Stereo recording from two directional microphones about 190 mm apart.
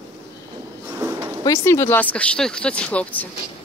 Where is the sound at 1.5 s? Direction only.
15° left (ahead or behind).